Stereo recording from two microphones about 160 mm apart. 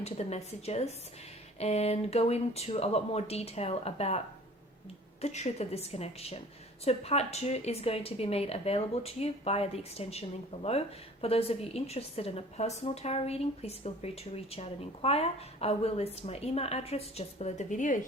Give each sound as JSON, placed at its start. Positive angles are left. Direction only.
{"t": 0.0, "sound": "speech", "side_deg": 40}
{"t": 5.2, "sound": "speech", "side_deg": 45}